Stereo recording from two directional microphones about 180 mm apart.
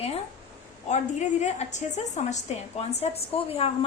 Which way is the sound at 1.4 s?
40° left (ahead or behind).